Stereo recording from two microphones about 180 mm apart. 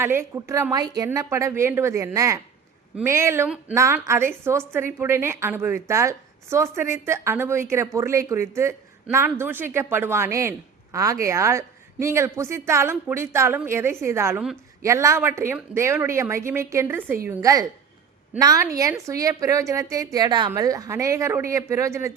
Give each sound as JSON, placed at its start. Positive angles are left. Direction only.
{"t": 0.0, "sound": "a woman's voice", "side_deg": -15}